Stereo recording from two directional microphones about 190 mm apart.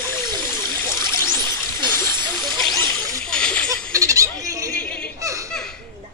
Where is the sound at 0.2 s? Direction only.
25° right (ahead or behind).